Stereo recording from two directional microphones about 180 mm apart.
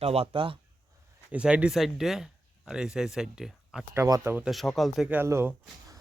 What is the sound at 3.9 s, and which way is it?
Speech, 15° right (ahead or behind).